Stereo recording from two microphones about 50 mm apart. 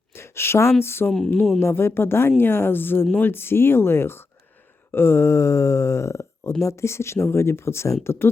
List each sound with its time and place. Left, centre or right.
0.1 s a sound: left
0.8 s speech: left
1.0 s speech: centre
1.5 s speech: left
8.0 s speech: left